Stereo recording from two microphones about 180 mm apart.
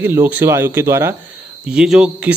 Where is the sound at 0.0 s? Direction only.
10° right (ahead or behind).